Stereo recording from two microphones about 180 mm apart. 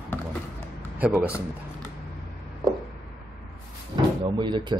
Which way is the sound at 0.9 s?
10° right (ahead or behind).